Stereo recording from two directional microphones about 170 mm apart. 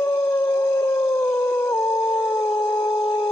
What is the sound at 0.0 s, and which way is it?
Howl, 15° left (ahead or behind).